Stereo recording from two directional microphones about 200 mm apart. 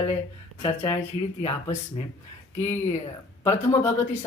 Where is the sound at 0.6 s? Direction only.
25° left (ahead or behind).